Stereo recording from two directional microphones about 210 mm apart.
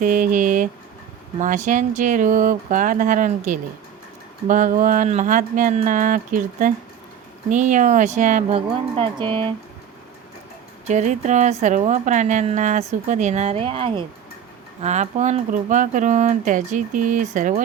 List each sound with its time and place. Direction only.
0.0 s a woman's voice: 40° right (ahead or behind); by 9.6 s 25° right (ahead or behind)
10.8 s a woman's voice: 35° right (ahead or behind)